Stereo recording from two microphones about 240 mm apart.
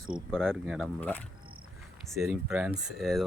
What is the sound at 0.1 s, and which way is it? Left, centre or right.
Speech, centre.